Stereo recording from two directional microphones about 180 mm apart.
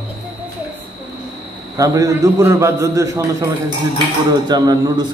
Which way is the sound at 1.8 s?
20° right (ahead or behind).